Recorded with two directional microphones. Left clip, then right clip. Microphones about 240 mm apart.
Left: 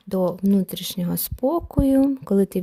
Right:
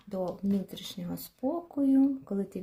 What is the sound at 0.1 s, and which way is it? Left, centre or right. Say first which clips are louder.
Speech: left 11 dB; left.